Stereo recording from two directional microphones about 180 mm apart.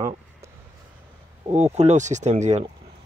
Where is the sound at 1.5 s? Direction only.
40° right (ahead or behind).